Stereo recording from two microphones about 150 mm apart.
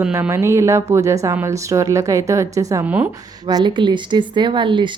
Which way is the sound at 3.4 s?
30° right (ahead or behind).